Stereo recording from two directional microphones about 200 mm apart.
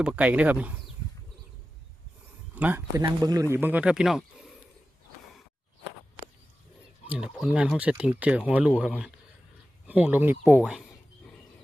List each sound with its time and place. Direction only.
0.0 s speech: 5° right (ahead or behind)
2.6 s speech: 10° right (ahead or behind)
7.1 s speech: 5° right (ahead or behind)